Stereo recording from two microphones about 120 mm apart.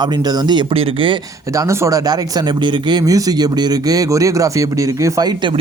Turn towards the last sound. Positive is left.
turn(degrees=-35)  # may be behind; listen again after turning